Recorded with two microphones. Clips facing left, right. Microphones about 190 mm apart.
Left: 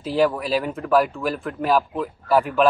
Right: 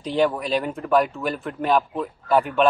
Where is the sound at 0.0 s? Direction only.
5° left (ahead or behind).